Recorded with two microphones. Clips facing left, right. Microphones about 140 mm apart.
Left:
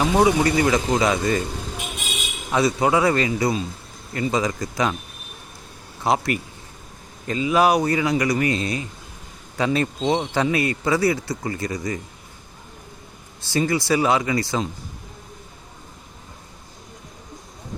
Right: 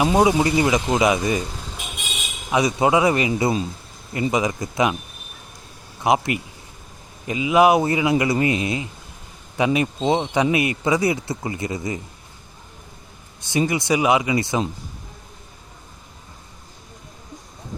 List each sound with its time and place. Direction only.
0.1 s a man's voice: 20° right (ahead or behind)
2.5 s a man's voice: 15° right (ahead or behind)
6.0 s a man's voice: 20° right (ahead or behind)
13.4 s a man's voice: 20° right (ahead or behind)